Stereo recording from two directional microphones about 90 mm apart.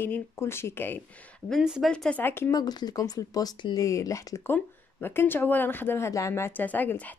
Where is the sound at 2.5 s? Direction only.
45° left (ahead or behind).